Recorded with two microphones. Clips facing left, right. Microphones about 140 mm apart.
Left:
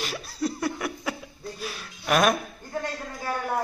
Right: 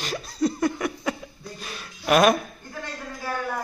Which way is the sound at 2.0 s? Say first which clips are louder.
Right 4 dB; centre (ahead or behind).